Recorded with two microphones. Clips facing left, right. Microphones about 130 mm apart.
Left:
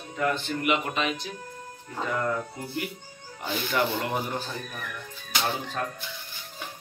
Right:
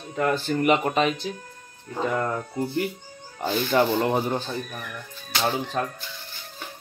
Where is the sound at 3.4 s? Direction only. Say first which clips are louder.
Right 6 dB; 30° right (ahead or behind).